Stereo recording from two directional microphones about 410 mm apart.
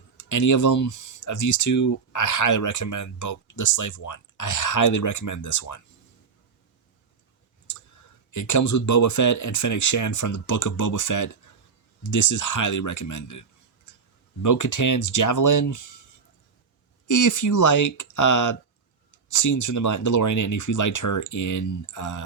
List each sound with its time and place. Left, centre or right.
0.2 s speech: left
8.3 s speech: left
14.4 s speech: left
17.1 s speech: left